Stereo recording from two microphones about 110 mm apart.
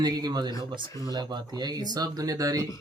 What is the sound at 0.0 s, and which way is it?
Speech, 40° right (ahead or behind).